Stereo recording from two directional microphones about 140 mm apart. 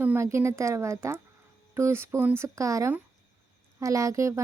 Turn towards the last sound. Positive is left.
turn(degrees=-20)  # may be behind; listen again after turning